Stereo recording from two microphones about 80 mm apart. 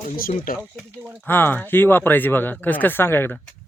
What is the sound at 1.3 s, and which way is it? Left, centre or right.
Speech, left.